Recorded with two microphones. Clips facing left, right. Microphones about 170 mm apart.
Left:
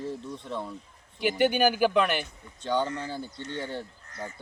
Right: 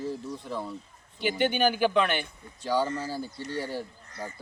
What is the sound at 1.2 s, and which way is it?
Speech, 10° left (ahead or behind).